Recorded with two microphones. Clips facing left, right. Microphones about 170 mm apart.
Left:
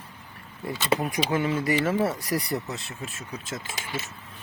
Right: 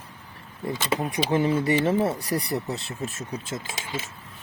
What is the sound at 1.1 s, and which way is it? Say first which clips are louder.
Speech: right 3 dB; 30° right (ahead or behind).